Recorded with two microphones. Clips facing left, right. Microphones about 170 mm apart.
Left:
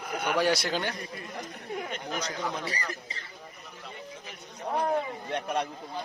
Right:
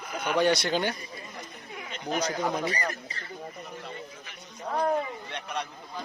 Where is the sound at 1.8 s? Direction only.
50° left (ahead or behind).